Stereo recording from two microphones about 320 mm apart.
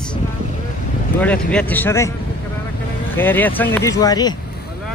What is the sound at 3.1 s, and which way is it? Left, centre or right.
Speech, centre.